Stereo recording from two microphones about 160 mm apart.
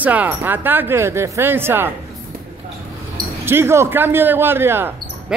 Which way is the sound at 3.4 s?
15° right (ahead or behind).